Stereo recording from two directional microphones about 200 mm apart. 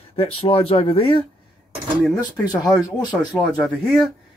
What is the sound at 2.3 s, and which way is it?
Speech, 20° left (ahead or behind).